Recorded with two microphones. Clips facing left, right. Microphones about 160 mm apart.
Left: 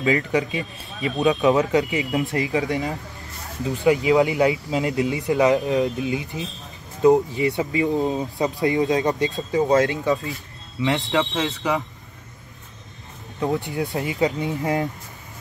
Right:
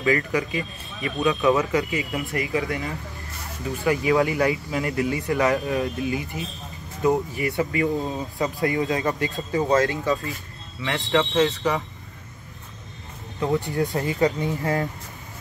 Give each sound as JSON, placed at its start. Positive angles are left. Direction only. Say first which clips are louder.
{"t": 0.0, "sound": "speech", "louder": "left 2 dB", "side_deg": 20}
{"t": 13.6, "sound": "speech", "louder": "right 1 dB", "side_deg": 20}